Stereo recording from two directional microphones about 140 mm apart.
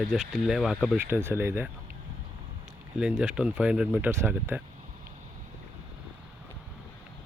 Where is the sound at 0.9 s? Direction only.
15° right (ahead or behind).